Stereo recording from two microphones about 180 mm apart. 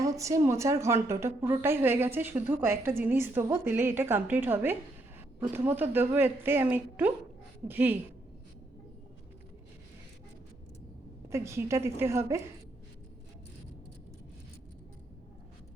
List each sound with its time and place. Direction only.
0.0 s a woman's voice: 20° right (ahead or behind)
11.3 s a woman's voice: 15° right (ahead or behind)